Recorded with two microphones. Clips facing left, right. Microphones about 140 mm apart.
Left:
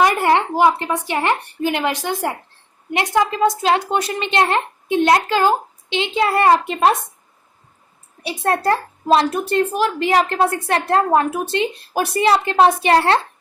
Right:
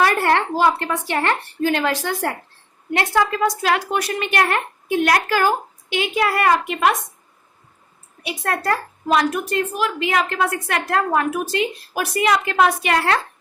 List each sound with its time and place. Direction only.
0.0 s a woman's voice: 15° left (ahead or behind); by 6.9 s 30° left (ahead or behind)
8.2 s speech: 30° left (ahead or behind)